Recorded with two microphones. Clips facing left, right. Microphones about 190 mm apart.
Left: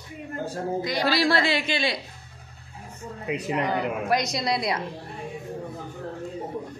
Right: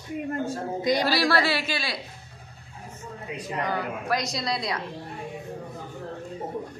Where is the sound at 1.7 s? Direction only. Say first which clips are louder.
Left 5 dB; 20° left (ahead or behind).